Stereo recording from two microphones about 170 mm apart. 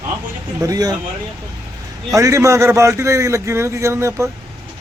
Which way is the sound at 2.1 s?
20° right (ahead or behind).